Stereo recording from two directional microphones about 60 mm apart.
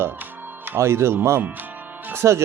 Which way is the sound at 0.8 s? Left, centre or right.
Right.